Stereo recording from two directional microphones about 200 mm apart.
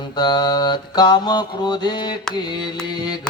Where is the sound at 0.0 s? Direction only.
20° left (ahead or behind).